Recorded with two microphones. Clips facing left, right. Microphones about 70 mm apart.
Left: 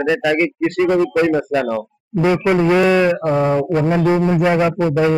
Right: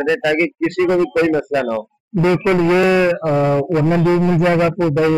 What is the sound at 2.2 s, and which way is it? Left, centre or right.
Speech, centre.